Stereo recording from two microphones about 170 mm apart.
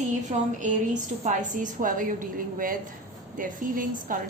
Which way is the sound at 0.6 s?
50° right (ahead or behind).